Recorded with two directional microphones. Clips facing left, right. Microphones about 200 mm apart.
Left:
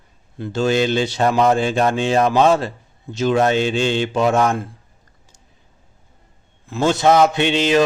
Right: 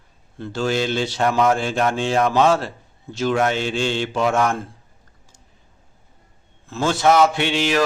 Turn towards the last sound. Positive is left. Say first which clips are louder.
# left 4 dB
turn(degrees=20)  # may be behind; listen again after turning